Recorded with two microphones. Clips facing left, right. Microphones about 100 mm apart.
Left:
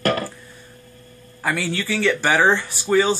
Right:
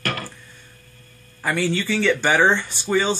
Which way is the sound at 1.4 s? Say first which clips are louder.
Right 1 dB; centre (ahead or behind).